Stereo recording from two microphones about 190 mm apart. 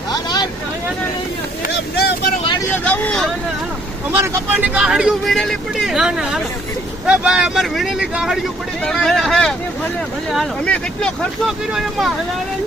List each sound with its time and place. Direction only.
0.1 s vehicle: 20° left (ahead or behind)
2.0 s vehicle: 55° left (ahead or behind)
2.7 s speech: 10° left (ahead or behind)
4.1 s speech: 10° right (ahead or behind)